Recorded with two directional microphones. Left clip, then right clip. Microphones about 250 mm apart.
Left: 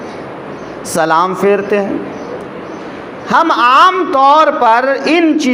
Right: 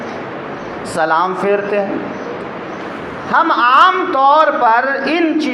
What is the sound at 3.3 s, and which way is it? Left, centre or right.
A man's voice, left.